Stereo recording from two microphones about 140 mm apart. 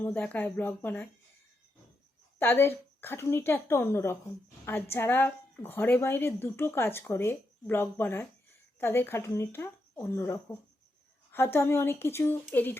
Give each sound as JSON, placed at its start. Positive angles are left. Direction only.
{"t": 0.0, "sound": "a woman's voice", "side_deg": 15}
{"t": 2.4, "sound": "a woman's voice", "side_deg": 15}